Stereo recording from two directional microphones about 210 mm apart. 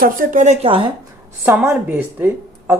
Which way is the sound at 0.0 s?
40° right (ahead or behind).